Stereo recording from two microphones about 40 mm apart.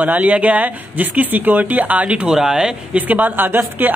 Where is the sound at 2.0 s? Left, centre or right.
Right.